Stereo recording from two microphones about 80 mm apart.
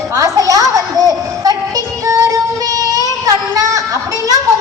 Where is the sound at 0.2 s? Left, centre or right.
Right.